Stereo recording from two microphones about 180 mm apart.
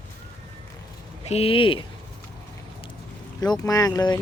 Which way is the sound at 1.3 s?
35° left (ahead or behind).